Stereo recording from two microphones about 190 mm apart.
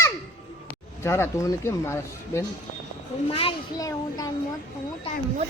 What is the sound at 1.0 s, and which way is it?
Speech, 15° left (ahead or behind).